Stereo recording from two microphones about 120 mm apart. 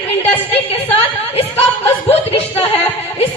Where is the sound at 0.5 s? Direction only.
55° left (ahead or behind).